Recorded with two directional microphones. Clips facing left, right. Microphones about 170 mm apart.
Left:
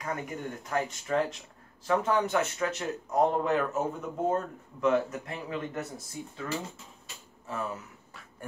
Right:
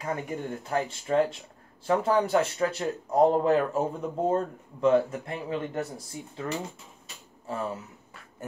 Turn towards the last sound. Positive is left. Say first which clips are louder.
# right 3 dB
turn(degrees=-30)  # may be behind; listen again after turning